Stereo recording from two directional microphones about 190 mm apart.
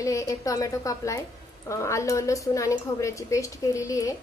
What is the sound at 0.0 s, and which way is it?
A woman's voice, 15° left (ahead or behind).